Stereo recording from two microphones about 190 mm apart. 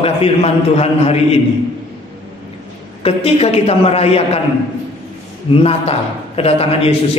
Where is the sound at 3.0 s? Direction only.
30° left (ahead or behind).